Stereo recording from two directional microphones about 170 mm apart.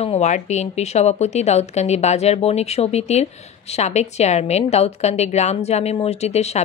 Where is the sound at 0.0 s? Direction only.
40° left (ahead or behind).